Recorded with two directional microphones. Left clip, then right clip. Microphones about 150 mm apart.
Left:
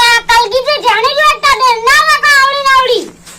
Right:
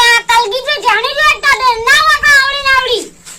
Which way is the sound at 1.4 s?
25° right (ahead or behind).